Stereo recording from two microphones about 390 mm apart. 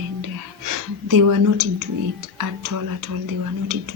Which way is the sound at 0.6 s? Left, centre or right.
Right.